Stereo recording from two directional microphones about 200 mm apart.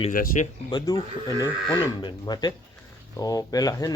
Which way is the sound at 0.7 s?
20° left (ahead or behind).